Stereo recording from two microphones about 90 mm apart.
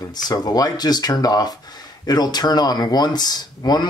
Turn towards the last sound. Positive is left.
turn(degrees=50)  # may be behind; listen again after turning